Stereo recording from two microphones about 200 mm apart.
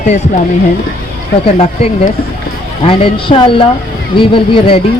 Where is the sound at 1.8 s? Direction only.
30° left (ahead or behind).